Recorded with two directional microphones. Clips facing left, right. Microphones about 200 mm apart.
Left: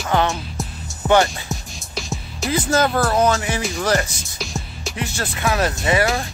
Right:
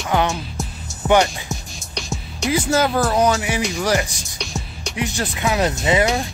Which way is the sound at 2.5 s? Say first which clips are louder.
Even; 10° right (ahead or behind).